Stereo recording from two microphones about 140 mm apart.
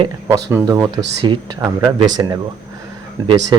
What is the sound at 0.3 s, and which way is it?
Speech, 25° right (ahead or behind).